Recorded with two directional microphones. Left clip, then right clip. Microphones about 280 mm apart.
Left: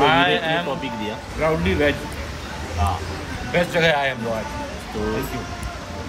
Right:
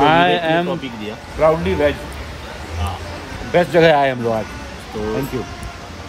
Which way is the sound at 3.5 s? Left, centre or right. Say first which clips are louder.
Right 6 dB; right.